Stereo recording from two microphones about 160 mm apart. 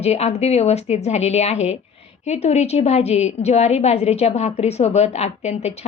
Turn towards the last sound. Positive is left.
turn(degrees=40)  # may be behind; listen again after turning